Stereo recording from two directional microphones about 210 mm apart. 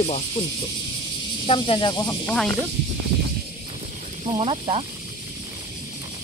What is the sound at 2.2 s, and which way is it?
Speech, 5° left (ahead or behind).